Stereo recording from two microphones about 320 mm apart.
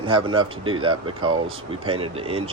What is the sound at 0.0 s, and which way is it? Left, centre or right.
Speech, centre.